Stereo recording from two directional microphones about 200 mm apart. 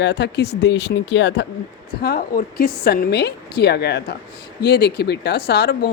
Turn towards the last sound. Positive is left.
turn(degrees=55)  # may be behind; listen again after turning